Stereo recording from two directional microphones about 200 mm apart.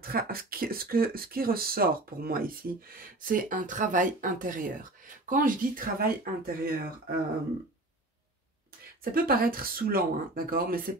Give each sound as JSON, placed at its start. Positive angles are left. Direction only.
{"t": 0.0, "sound": "speech", "side_deg": -45}
{"t": 9.1, "sound": "speech", "side_deg": -45}